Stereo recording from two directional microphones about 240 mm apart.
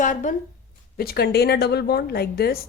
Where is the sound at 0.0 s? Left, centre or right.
Left.